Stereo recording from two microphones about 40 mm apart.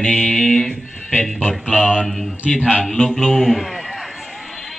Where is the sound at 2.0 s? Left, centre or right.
Centre.